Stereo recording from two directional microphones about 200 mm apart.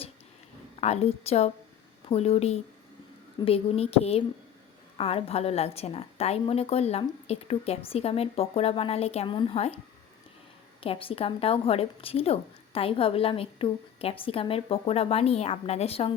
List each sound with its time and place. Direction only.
0.8 s a woman's voice: 30° left (ahead or behind)
10.8 s a woman's voice: 25° left (ahead or behind)